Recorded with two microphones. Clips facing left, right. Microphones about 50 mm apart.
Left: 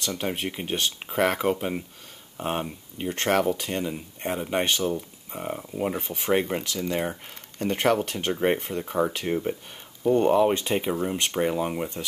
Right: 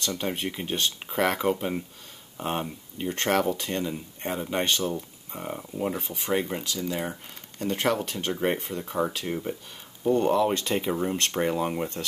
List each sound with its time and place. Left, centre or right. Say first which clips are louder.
0.0 s speech: left 1 dB; centre
5.9 s speech: left 3 dB; left
10.9 s speech: even; centre